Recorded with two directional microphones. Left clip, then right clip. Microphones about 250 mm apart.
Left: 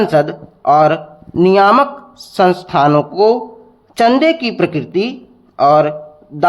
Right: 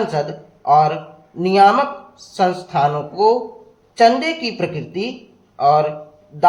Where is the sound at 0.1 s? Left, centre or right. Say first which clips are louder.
Left 9 dB; left.